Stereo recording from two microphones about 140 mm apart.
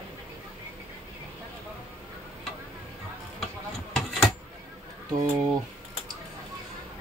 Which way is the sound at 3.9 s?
Centre (ahead or behind).